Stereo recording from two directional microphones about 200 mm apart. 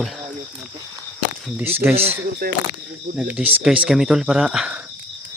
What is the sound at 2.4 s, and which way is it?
Speech, 45° right (ahead or behind).